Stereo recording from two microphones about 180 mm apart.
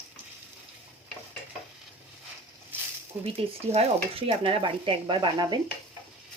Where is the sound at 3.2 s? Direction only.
35° right (ahead or behind).